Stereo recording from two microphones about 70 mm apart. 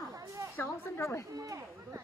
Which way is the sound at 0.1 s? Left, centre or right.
Right.